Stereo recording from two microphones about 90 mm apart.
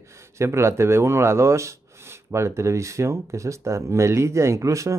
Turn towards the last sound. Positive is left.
turn(degrees=-35)  # may be behind; listen again after turning